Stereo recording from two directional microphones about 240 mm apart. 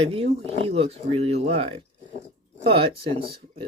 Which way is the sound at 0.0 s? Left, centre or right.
Right.